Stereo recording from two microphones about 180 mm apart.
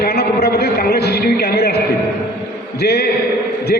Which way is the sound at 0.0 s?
60° left (ahead or behind).